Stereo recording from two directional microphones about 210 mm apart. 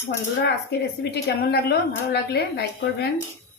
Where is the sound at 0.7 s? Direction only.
50° left (ahead or behind).